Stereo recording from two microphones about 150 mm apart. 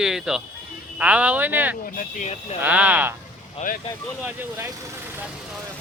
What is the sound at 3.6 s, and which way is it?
Speech, 55° left (ahead or behind).